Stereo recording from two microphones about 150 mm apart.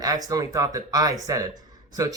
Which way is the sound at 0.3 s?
25° right (ahead or behind).